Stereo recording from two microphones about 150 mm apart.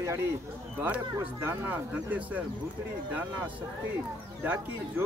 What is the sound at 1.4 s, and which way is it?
Speech, 10° right (ahead or behind).